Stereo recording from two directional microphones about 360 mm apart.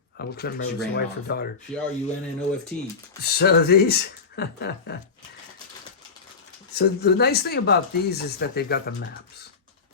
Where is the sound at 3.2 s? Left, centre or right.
Left.